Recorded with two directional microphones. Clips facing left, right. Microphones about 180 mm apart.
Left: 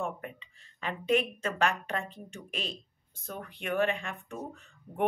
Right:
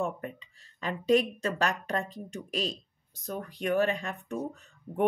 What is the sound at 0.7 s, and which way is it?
Speech, 35° right (ahead or behind).